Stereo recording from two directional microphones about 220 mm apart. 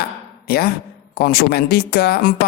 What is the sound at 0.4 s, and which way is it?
A woman's voice, 45° left (ahead or behind).